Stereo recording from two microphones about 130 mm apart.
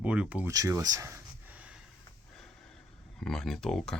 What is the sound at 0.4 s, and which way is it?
Speech, 25° right (ahead or behind).